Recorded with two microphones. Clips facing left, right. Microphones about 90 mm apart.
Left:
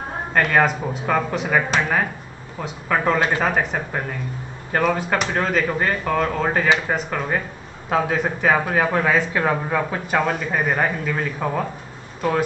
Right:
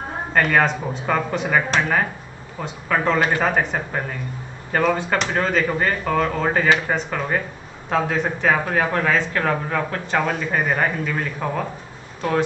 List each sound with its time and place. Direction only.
0.3 s a man's voice: centre (ahead or behind)